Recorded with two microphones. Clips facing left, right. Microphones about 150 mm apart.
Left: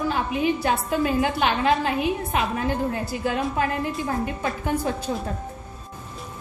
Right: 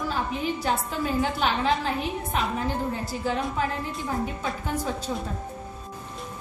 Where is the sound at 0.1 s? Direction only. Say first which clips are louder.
Left 5 dB; 65° left (ahead or behind).